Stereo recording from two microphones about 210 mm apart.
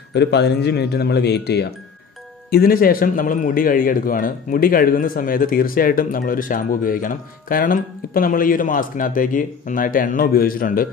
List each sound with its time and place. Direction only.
0.1 s a man's voice: 55° left (ahead or behind)